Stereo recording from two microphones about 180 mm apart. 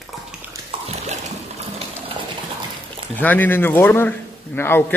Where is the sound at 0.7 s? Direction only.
35° right (ahead or behind).